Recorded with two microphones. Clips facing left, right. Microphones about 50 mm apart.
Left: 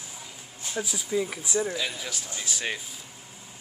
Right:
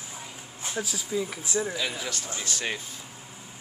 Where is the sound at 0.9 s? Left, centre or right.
Centre.